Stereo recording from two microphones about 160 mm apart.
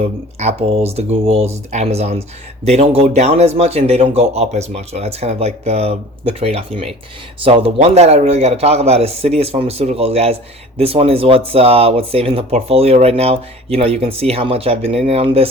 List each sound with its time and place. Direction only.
0.3 s speech: 40° right (ahead or behind)